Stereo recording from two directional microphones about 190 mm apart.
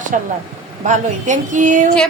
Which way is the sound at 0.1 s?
45° right (ahead or behind).